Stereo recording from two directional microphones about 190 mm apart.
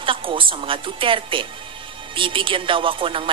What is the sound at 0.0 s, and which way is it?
Speech, 25° right (ahead or behind).